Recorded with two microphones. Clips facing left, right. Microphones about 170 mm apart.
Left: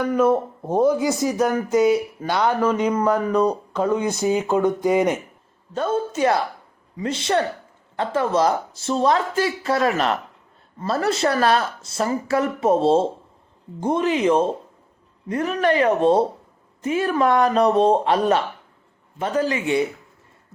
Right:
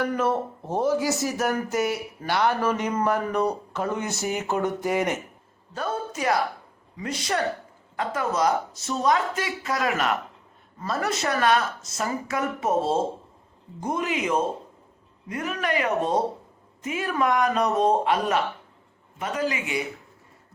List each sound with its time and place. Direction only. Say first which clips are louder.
0.3 s speech: left 6 dB; 15° left (ahead or behind); by 19.8 s 30° left (ahead or behind)